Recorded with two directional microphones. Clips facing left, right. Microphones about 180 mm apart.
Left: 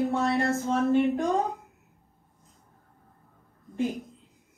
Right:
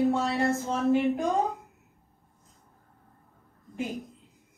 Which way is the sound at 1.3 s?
Centre (ahead or behind).